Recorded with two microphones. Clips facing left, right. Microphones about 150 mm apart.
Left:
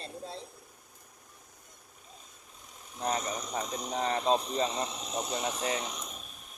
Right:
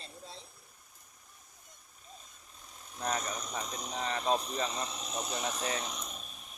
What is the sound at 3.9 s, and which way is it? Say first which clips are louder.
Speech: left 6 dB; 45° left (ahead or behind).